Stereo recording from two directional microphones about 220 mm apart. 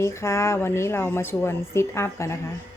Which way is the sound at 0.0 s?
10° left (ahead or behind).